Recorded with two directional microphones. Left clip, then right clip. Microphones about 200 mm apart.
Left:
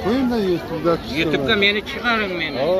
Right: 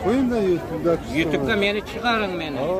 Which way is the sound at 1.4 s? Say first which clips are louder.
Left 4 dB; 5° right (ahead or behind).